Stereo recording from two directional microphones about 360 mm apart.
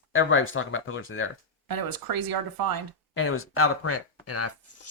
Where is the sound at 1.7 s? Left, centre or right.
Right.